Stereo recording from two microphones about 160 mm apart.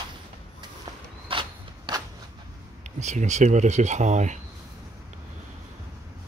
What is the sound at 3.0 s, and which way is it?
Speech, 45° right (ahead or behind).